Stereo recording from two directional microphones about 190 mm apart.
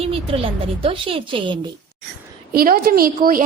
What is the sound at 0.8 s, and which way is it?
Speech, 30° right (ahead or behind).